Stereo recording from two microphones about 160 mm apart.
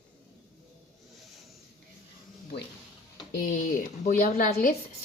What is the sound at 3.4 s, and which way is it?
Speech, 60° left (ahead or behind).